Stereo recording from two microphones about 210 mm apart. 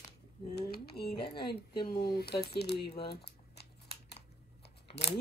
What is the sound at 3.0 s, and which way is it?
Crumpling, 50° left (ahead or behind).